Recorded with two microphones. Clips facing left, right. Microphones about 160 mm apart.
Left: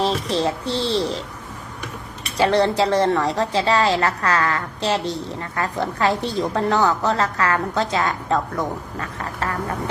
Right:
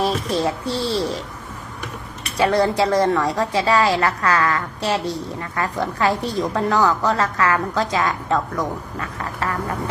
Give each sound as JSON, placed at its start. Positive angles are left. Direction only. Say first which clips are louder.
{"t": 0.3, "sound": "a woman's voice", "louder": "even", "side_deg": 30}
{"t": 2.4, "sound": "a woman's voice", "louder": "even", "side_deg": 30}